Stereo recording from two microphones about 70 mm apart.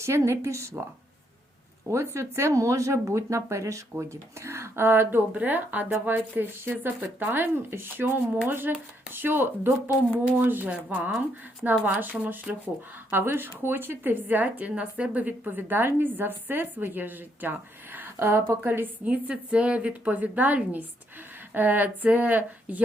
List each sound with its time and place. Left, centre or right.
0.0 s speech: right
1.9 s a woman's voice: right
13.1 s a woman's voice: right
17.9 s a sound: right
18.6 s a woman's voice: right